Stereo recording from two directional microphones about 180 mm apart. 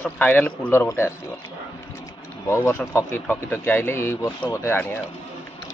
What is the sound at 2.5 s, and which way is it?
Speech, 15° left (ahead or behind).